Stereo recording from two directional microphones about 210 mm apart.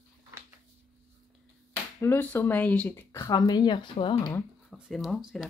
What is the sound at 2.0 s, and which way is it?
Speech, 10° left (ahead or behind).